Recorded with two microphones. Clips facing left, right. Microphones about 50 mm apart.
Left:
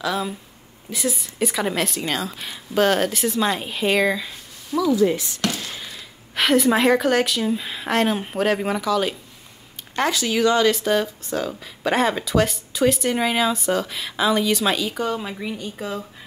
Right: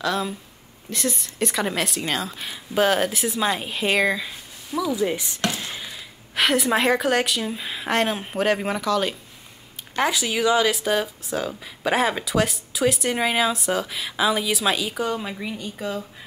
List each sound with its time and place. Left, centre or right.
0.0 s speech: centre
4.9 s speech: centre
5.8 s speech: centre